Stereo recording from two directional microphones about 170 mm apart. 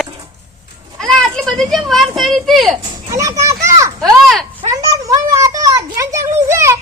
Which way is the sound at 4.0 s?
Centre (ahead or behind).